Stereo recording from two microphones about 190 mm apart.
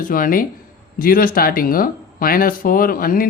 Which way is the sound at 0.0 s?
45° left (ahead or behind).